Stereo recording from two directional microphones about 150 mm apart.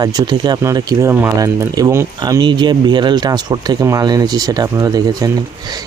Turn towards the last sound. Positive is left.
turn(degrees=-25)  # may be behind; listen again after turning